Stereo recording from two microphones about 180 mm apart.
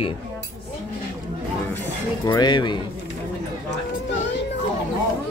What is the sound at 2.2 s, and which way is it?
Speech, 25° left (ahead or behind).